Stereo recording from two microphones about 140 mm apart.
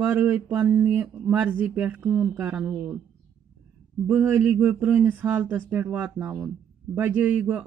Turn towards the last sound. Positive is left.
turn(degrees=-10)  # may be behind; listen again after turning